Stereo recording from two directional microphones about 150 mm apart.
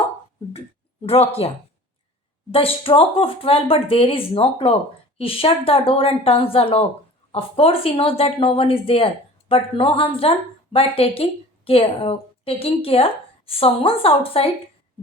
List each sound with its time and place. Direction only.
1.0 s a woman's voice: 40° left (ahead or behind)